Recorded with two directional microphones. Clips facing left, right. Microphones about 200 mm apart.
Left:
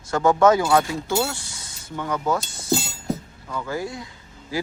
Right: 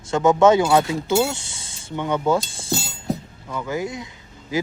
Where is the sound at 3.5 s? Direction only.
15° right (ahead or behind).